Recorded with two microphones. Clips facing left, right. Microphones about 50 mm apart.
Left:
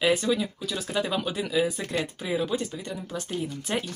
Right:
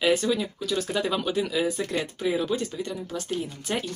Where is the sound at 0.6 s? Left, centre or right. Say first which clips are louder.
Right 2 dB; centre.